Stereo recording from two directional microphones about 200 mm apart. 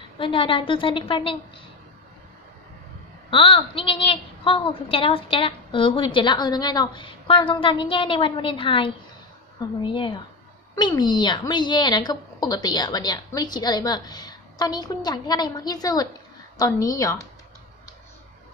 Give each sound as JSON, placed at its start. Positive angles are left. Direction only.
{"t": 0.2, "sound": "a woman's voice", "side_deg": 25}
{"t": 3.3, "sound": "a woman's voice", "side_deg": 25}